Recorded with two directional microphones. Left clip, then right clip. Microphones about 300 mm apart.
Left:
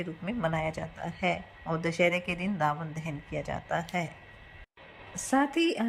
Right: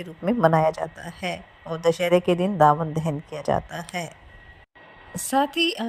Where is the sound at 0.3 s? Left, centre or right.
Right.